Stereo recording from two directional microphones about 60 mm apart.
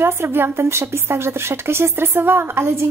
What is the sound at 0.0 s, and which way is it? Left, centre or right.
A woman's voice, right.